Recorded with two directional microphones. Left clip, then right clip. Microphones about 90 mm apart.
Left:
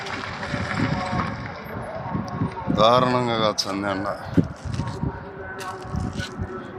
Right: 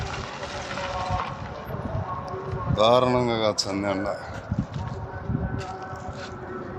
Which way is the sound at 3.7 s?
20° right (ahead or behind).